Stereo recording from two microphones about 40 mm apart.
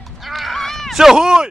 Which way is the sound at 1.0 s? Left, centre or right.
Centre.